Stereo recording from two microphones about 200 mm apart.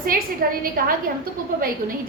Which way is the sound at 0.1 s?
45° right (ahead or behind).